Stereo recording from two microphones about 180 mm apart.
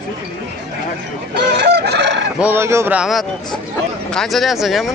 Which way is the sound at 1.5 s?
65° right (ahead or behind).